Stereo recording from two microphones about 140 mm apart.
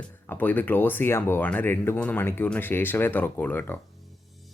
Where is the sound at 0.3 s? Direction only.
10° left (ahead or behind).